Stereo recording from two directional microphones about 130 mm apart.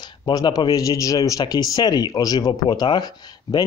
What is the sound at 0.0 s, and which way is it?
Speech, 30° left (ahead or behind).